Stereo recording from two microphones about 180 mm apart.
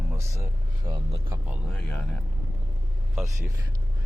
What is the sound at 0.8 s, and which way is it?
Speech, 25° right (ahead or behind).